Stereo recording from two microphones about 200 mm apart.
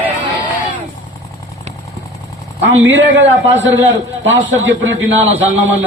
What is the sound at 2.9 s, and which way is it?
A man's voice, 65° right (ahead or behind).